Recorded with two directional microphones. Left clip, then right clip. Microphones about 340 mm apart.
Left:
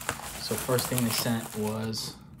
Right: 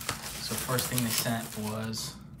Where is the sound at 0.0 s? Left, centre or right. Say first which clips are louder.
Left 1 dB; centre.